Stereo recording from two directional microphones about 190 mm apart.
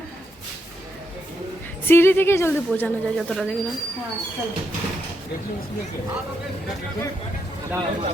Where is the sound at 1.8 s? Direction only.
10° left (ahead or behind).